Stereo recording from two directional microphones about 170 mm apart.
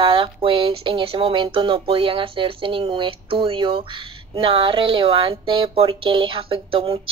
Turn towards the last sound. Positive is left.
turn(degrees=-30)  # may be behind; listen again after turning